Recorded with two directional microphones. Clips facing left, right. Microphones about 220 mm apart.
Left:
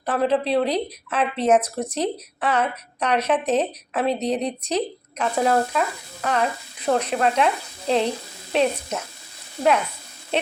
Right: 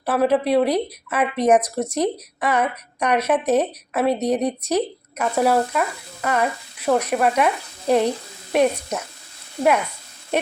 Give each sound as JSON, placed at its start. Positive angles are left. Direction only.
{"t": 0.0, "sound": "speech", "side_deg": -10}